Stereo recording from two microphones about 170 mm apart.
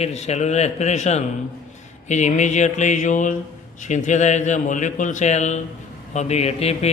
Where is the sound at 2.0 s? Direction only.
45° left (ahead or behind).